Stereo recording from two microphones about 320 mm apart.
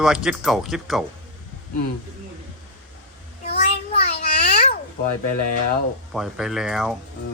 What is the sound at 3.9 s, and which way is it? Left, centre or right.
Babbling, centre.